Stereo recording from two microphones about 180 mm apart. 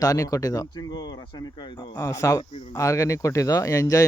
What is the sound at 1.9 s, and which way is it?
Speech, 15° left (ahead or behind).